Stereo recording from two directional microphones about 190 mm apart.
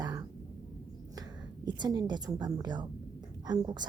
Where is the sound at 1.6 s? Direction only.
20° right (ahead or behind).